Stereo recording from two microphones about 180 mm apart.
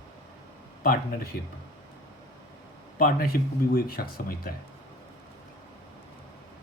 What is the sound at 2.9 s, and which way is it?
Speech, 50° left (ahead or behind).